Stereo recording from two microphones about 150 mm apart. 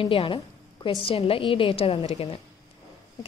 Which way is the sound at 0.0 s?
35° left (ahead or behind).